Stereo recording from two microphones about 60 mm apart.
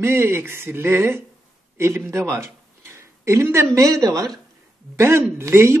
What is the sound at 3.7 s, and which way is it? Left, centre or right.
Speech, right.